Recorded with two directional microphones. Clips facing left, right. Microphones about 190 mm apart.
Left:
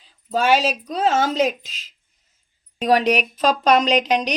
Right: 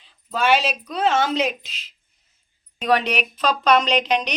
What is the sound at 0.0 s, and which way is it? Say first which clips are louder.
Speech: left 2 dB; 40° left (ahead or behind).